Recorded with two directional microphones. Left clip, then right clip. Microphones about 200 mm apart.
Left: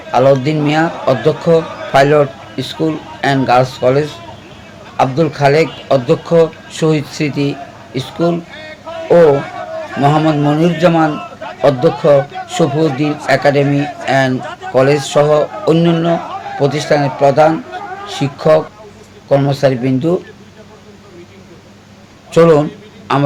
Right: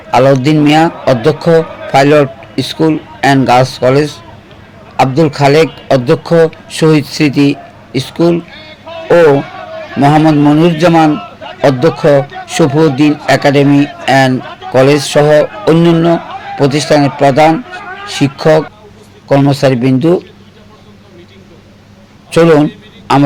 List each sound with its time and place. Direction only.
0.1 s a man's voice: 40° right (ahead or behind)
10.0 s a man's voice: 35° right (ahead or behind)
22.3 s a man's voice: 35° right (ahead or behind)